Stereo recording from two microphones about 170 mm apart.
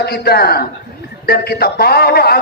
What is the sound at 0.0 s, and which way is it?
A man's voice, 65° left (ahead or behind).